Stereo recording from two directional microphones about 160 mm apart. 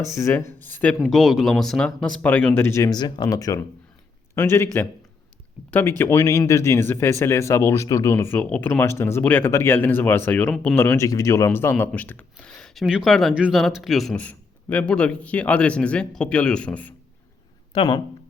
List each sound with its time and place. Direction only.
0.0 s speech: 15° left (ahead or behind)
1.0 s speech: centre (ahead or behind)
10.8 s speech: 15° left (ahead or behind)
17.7 s speech: 30° left (ahead or behind)